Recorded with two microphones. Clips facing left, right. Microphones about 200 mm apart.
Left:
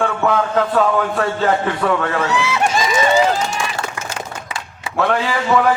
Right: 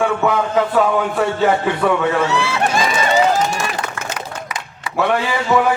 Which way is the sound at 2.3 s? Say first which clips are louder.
Even; 15° left (ahead or behind).